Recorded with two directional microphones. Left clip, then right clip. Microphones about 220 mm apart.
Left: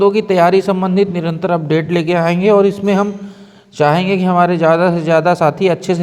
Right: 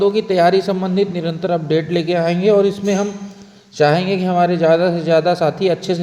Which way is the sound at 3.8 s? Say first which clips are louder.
Left 2 dB; 15° left (ahead or behind).